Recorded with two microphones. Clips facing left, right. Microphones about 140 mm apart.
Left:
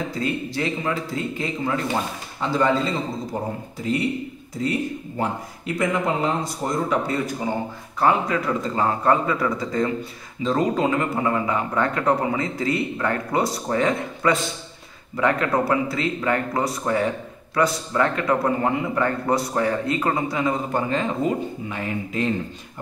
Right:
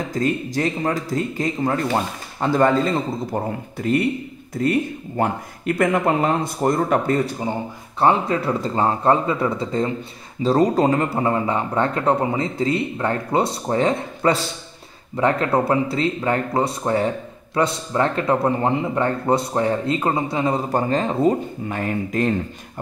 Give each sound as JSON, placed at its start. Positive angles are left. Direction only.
{"t": 0.1, "sound": "a man's voice", "side_deg": -45}
{"t": 8.0, "sound": "speech", "side_deg": -30}
{"t": 21.6, "sound": "speech", "side_deg": -50}